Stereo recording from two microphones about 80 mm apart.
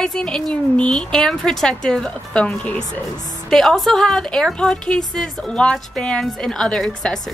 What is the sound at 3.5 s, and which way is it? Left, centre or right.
A woman's voice, centre.